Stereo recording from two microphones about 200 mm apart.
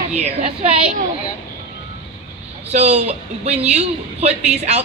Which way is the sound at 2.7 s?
35° right (ahead or behind).